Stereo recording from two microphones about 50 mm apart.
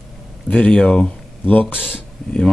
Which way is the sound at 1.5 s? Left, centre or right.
Left.